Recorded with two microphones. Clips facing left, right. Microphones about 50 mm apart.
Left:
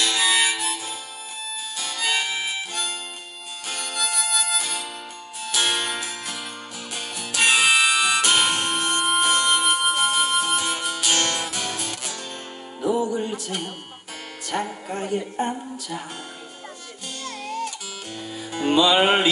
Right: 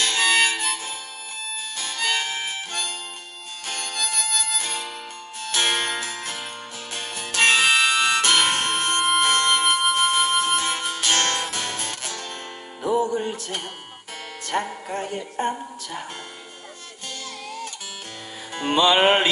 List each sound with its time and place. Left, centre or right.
0.0 s harmonica: right
4.6 s music: right
17.2 s music: left
18.5 s music: right